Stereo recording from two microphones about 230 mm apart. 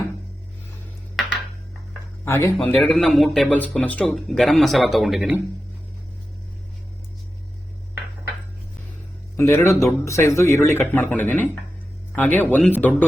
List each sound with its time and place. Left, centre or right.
2.2 s speech: centre
9.4 s speech: centre